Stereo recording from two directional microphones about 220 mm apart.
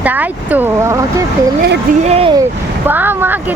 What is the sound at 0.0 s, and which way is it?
Vehicle, 10° right (ahead or behind).